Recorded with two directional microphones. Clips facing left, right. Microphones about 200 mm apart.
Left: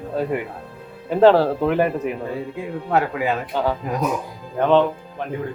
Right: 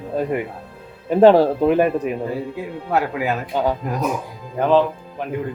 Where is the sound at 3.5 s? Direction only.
15° right (ahead or behind).